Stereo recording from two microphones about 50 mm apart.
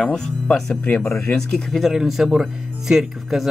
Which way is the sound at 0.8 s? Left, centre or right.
Left.